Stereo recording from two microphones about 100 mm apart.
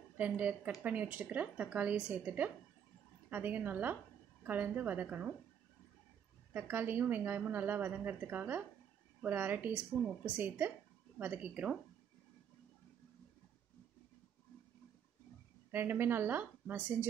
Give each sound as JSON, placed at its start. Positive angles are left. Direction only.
{"t": 0.2, "sound": "a woman's voice", "side_deg": -15}
{"t": 6.5, "sound": "a woman's voice", "side_deg": -20}
{"t": 15.7, "sound": "a woman's voice", "side_deg": -20}